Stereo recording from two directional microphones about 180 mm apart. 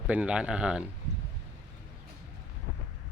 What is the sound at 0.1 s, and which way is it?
Speech, 5° right (ahead or behind).